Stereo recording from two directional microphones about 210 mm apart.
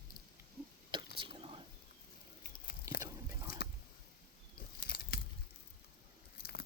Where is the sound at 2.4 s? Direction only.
45° left (ahead or behind).